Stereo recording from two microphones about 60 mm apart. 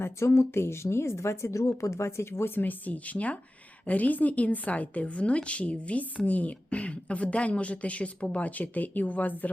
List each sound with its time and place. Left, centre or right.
0.0 s speech: left
2.6 s a woman's voice: left